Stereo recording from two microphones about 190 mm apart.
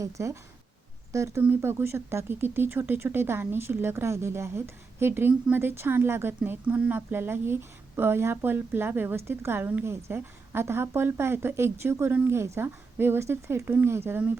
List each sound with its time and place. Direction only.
0.0 s speech: 15° right (ahead or behind)